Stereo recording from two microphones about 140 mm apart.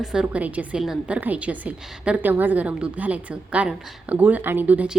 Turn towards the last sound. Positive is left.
turn(degrees=-10)  # may be behind; listen again after turning